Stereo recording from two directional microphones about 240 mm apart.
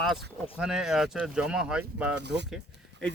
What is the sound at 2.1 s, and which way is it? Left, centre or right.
Speech, right.